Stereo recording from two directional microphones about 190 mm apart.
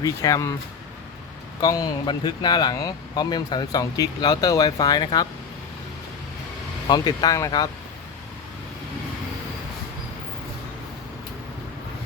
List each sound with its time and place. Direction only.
0.0 s speech: 15° left (ahead or behind)
1.6 s speech: 20° left (ahead or behind)
6.8 s speech: 20° left (ahead or behind)